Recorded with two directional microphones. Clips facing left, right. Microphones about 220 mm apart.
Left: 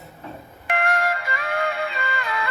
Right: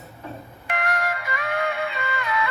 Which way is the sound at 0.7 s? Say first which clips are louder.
Left 3 dB; 25° left (ahead or behind).